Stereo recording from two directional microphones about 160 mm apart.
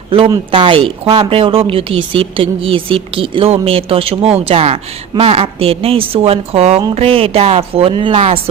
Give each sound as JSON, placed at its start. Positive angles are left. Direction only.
{"t": 0.1, "sound": "speech", "side_deg": -35}